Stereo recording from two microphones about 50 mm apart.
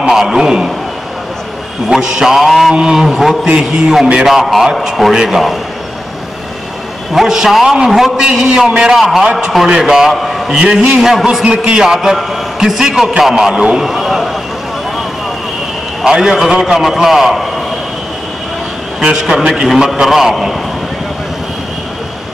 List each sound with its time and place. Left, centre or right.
0.1 s a man's voice: centre
1.9 s a man's voice: centre
2.7 s a man's voice: centre
5.1 s a man's voice: centre
7.2 s a man's voice: centre
8.2 s a man's voice: centre
8.9 s a man's voice: centre
10.5 s a man's voice: centre
11.4 s a man's voice: centre
13.6 s a man's voice: centre
13.8 s a man's voice: centre
16.0 s a man's voice: centre
18.9 s a man's voice: centre